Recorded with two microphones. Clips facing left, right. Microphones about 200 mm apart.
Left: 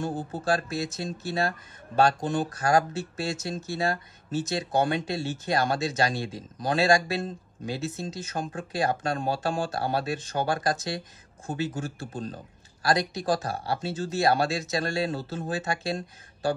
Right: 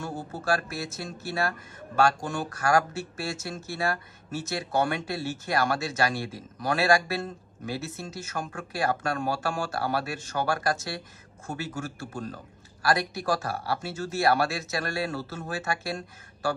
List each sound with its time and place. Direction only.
0.0 s speech: 20° left (ahead or behind)